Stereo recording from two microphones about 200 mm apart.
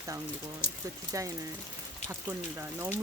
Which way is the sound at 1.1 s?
15° right (ahead or behind).